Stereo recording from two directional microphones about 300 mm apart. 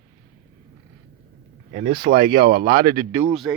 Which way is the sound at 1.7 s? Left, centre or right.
Right.